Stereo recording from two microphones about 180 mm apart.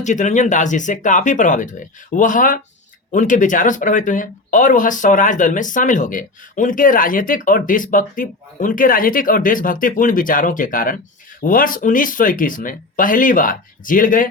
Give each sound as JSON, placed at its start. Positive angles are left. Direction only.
{"t": 0.0, "sound": "speech", "side_deg": 40}